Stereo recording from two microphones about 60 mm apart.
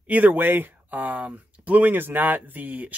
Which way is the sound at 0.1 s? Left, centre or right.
Right.